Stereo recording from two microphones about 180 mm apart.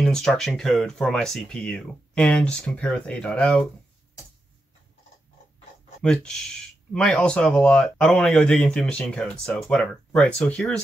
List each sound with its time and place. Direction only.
0.0 s speech: 5° left (ahead or behind)
6.0 s speech: 5° left (ahead or behind)